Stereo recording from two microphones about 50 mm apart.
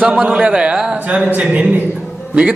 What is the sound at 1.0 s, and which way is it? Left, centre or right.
Speech, right.